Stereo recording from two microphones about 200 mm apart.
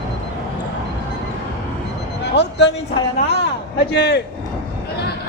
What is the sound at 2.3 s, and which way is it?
Speech, 60° left (ahead or behind).